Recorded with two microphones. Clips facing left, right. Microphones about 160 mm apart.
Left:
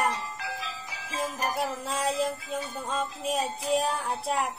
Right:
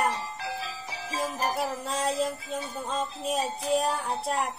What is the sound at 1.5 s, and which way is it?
Music, centre (ahead or behind).